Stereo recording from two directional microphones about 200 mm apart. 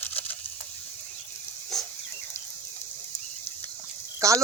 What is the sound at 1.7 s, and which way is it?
Dog, centre (ahead or behind).